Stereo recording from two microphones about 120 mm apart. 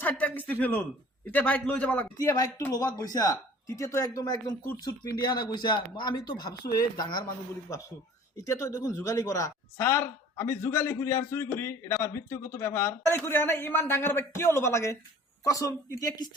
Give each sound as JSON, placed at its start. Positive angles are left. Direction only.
{"t": 0.0, "sound": "a man's voice", "side_deg": 15}
{"t": 2.1, "sound": "a man's voice", "side_deg": 30}